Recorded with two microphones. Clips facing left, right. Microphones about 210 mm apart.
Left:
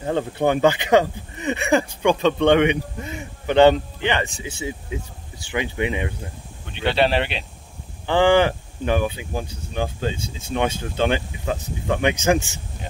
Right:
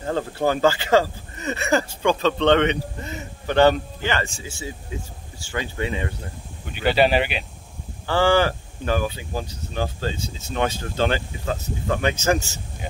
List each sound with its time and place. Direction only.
0.0 s speech: 20° left (ahead or behind)
6.6 s speech: 5° right (ahead or behind)
8.1 s speech: 15° left (ahead or behind)